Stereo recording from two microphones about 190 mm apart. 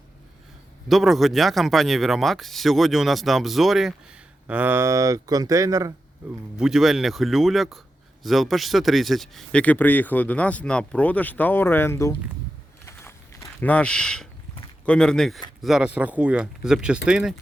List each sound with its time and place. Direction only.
0.9 s speech: centre (ahead or behind); by 5.9 s 15° right (ahead or behind)
6.6 s speech: centre (ahead or behind); by 12.1 s 15° left (ahead or behind)
13.0 s walk: 10° left (ahead or behind)
14.8 s speech: 5° left (ahead or behind)